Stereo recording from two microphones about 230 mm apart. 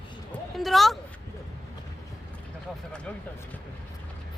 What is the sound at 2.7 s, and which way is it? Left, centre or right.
Speech, centre.